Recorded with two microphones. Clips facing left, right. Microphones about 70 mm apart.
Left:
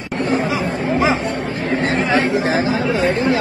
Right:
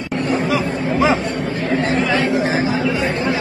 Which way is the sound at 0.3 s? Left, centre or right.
Left.